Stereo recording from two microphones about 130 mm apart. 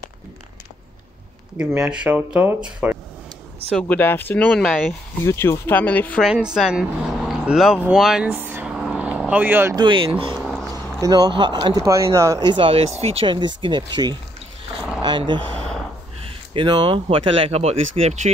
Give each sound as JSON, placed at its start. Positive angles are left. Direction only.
{"t": 1.8, "sound": "speech", "side_deg": -10}
{"t": 3.9, "sound": "speech", "side_deg": 15}
{"t": 5.2, "sound": "speech", "side_deg": 20}
{"t": 6.2, "sound": "speech", "side_deg": -5}
{"t": 7.9, "sound": "vehicle", "side_deg": -5}
{"t": 9.8, "sound": "speech", "side_deg": -40}
{"t": 11.0, "sound": "speech", "side_deg": -30}
{"t": 11.7, "sound": "speech", "side_deg": -25}
{"t": 12.4, "sound": "speech", "side_deg": -45}
{"t": 15.5, "sound": "a sound", "side_deg": 5}
{"t": 16.3, "sound": "speech", "side_deg": -40}